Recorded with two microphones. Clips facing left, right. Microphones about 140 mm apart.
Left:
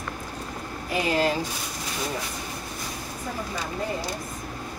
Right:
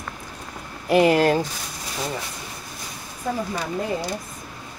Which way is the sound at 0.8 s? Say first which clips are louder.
Right 8 dB; 65° right (ahead or behind).